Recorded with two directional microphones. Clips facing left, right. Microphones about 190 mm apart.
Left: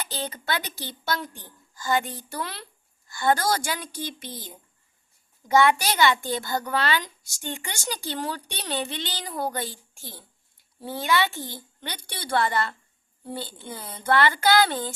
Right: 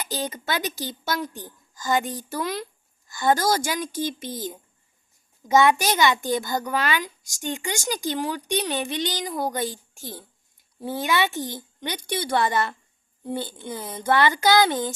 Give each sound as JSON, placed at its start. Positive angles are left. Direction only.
{"t": 0.1, "sound": "a child's voice", "side_deg": -15}